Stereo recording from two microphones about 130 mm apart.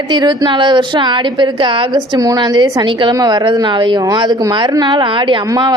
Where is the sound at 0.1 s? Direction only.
35° right (ahead or behind).